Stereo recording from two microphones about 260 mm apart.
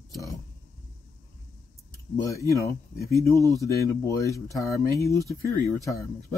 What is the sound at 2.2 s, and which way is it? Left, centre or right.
Speech, centre.